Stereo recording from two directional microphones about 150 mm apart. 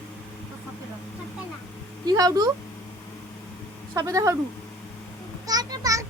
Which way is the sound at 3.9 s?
20° right (ahead or behind).